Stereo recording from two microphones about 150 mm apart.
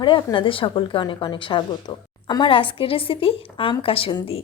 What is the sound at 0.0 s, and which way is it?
A woman's voice, 30° left (ahead or behind).